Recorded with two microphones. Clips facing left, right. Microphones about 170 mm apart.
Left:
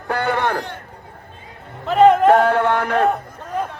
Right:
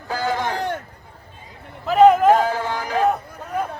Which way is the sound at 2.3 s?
65° left (ahead or behind).